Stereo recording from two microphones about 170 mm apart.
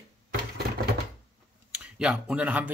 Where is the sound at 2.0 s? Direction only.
5° right (ahead or behind).